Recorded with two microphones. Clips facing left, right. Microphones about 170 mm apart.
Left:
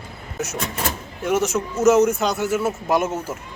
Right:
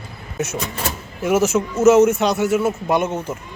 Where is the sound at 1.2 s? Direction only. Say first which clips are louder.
Right 4 dB; 5° right (ahead or behind).